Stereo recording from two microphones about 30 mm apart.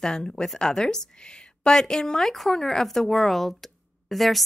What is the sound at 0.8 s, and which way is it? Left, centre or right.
A woman's voice, left.